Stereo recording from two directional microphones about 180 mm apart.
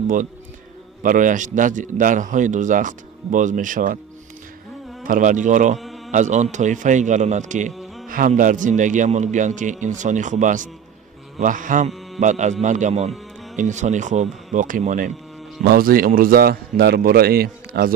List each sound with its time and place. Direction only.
0.0 s a man's voice: 45° right (ahead or behind)
5.0 s a man's voice: 45° right (ahead or behind)
5.8 s a sound: centre (ahead or behind)
6.1 s a man's voice: 40° right (ahead or behind)
15.6 s a man's voice: 55° right (ahead or behind)